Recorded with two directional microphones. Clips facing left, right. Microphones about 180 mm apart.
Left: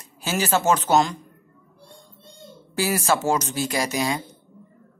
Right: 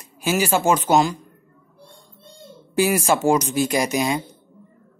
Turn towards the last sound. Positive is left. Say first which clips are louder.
# right 3 dB
turn(degrees=-20)  # may be behind; listen again after turning